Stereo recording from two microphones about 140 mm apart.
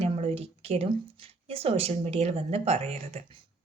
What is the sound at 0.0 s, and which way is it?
A woman's voice, 45° right (ahead or behind).